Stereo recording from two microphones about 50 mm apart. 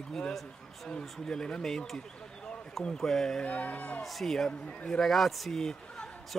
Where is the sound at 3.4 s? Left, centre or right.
Left.